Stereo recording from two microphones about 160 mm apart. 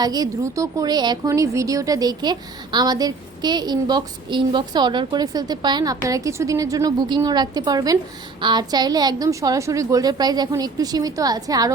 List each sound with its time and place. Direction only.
0.0 s a woman's voice: 25° right (ahead or behind)